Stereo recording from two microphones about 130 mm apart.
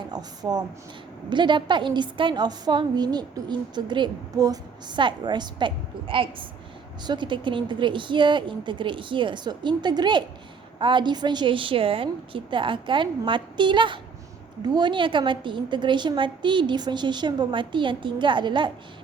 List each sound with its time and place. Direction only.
0.1 s a woman's voice: 30° right (ahead or behind)